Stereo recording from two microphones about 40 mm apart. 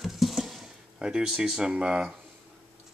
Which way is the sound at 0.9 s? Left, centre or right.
Centre.